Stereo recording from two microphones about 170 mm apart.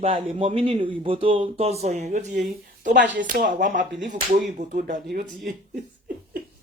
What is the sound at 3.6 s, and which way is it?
Speech, 50° right (ahead or behind).